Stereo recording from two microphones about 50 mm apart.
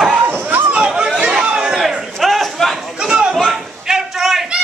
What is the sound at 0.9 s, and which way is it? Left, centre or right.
Chatter, centre.